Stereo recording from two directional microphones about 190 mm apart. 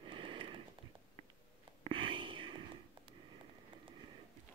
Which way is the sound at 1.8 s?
25° right (ahead or behind).